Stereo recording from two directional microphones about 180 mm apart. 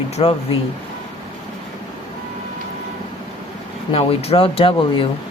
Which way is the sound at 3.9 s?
35° left (ahead or behind).